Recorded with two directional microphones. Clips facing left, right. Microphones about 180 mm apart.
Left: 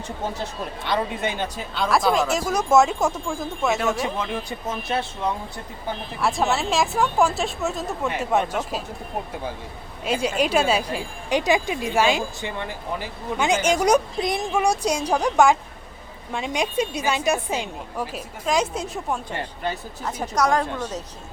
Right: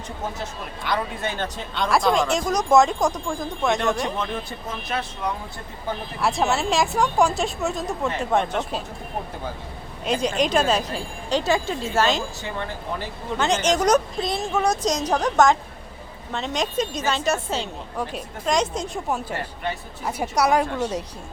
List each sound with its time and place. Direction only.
0.9 s speech: 20° left (ahead or behind); by 4.3 s 5° left (ahead or behind)
4.9 s speech: 25° left (ahead or behind)
6.1 s speech: centre (ahead or behind)
10.0 s a woman's voice: 5° left (ahead or behind)
20.1 s speech: 10° right (ahead or behind)